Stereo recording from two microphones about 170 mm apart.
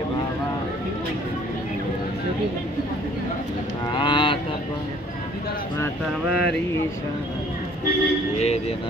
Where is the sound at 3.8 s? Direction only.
30° left (ahead or behind).